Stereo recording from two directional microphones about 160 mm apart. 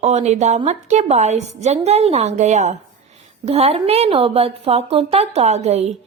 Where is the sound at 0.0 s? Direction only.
45° right (ahead or behind).